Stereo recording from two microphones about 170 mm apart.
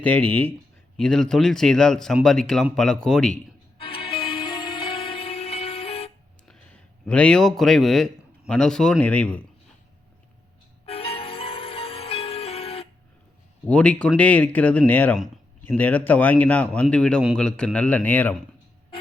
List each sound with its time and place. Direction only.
0.0 s a man's voice: 10° left (ahead or behind)
3.8 s music: 30° left (ahead or behind)
7.0 s a man's voice: 5° left (ahead or behind)
10.8 s music: 35° left (ahead or behind)
13.7 s a man's voice: 5° left (ahead or behind)